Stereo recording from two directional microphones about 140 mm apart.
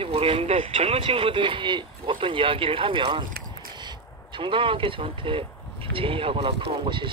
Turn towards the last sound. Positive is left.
turn(degrees=-40)  # may be behind; listen again after turning